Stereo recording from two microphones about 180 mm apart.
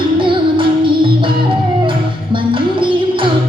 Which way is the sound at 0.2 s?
30° right (ahead or behind).